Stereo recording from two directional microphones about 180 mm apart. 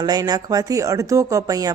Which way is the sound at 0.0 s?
20° right (ahead or behind).